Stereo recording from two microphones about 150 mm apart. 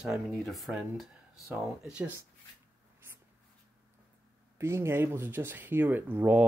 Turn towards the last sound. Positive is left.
turn(degrees=-15)  # may be behind; listen again after turning